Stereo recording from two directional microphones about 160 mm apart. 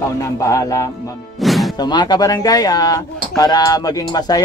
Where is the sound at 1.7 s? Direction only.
25° left (ahead or behind).